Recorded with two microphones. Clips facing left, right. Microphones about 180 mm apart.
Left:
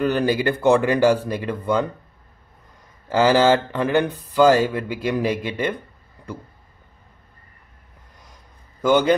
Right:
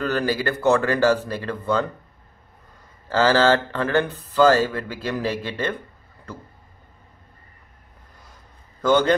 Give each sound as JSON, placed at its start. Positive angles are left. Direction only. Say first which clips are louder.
{"t": 0.0, "sound": "speech", "louder": "left 3 dB", "side_deg": 15}
{"t": 3.1, "sound": "speech", "louder": "left 2 dB", "side_deg": 15}
{"t": 8.8, "sound": "speech", "louder": "left 1 dB", "side_deg": 10}